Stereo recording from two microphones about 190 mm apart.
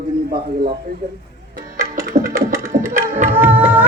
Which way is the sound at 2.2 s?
15° right (ahead or behind).